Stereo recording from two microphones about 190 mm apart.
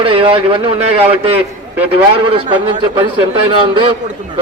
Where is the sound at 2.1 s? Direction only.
30° right (ahead or behind).